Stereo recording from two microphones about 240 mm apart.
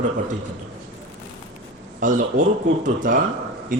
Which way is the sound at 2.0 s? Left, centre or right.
Right.